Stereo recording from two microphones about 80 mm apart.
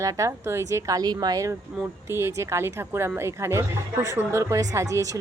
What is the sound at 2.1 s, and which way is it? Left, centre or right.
Speech, right.